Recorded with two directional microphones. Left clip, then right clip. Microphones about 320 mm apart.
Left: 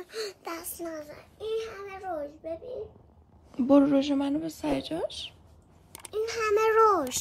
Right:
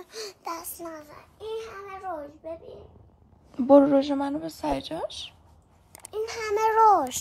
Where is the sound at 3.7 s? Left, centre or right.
Centre.